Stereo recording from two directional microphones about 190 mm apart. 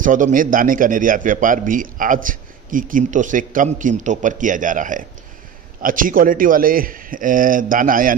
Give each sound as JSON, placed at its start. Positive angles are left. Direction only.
{"t": 0.0, "sound": "a man's voice", "side_deg": -45}